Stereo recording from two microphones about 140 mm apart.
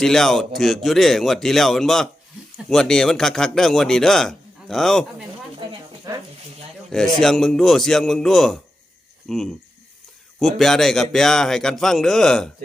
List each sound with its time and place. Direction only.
0.0 s a man's voice: 5° left (ahead or behind)
6.1 s speech: 25° right (ahead or behind)
6.9 s a man's voice: 5° left (ahead or behind)